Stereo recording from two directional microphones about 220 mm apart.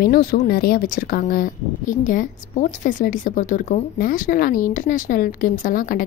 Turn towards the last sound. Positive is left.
turn(degrees=40)  # may be behind; listen again after turning